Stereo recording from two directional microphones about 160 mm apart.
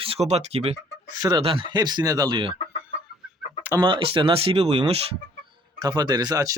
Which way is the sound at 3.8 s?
35° right (ahead or behind).